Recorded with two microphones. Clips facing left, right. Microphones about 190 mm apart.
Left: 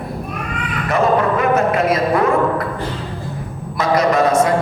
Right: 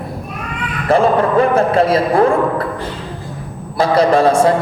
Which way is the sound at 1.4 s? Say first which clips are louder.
Right 3 dB; 30° right (ahead or behind).